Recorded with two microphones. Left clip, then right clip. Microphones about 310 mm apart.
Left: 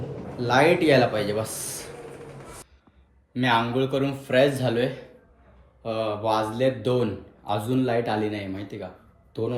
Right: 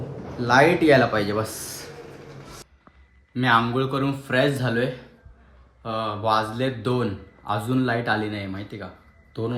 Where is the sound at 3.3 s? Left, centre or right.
Centre.